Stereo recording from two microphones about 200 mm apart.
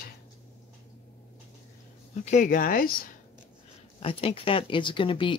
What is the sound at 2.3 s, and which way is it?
Speech, 40° left (ahead or behind).